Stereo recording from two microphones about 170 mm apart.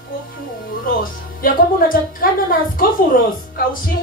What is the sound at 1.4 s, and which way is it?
A woman's voice, 55° left (ahead or behind).